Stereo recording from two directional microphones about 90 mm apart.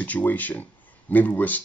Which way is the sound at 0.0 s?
20° left (ahead or behind).